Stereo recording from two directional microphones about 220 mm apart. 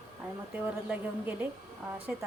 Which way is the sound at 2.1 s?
5° right (ahead or behind).